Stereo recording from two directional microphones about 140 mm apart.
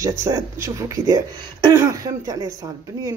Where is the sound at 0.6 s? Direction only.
25° right (ahead or behind).